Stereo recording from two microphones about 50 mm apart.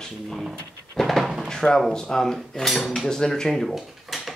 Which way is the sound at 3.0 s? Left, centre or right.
Centre.